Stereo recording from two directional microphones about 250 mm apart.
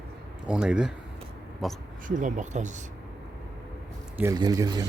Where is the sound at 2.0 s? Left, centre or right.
Right.